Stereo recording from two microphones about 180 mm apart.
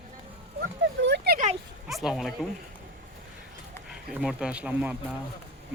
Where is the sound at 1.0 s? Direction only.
70° right (ahead or behind).